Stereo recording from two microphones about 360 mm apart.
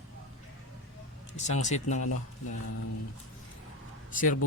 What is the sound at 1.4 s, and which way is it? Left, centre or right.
Speech, centre.